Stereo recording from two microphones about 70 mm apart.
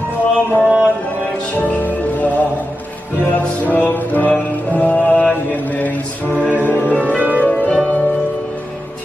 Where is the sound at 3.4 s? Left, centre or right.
Left.